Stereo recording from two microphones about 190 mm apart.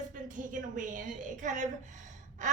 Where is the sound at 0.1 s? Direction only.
45° right (ahead or behind).